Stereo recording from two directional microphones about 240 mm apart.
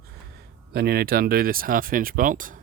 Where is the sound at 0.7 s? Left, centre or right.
Right.